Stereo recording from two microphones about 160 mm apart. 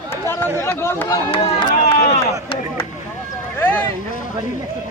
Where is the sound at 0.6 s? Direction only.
15° left (ahead or behind).